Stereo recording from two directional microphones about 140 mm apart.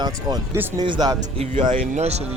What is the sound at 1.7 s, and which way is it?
Speech, 50° right (ahead or behind).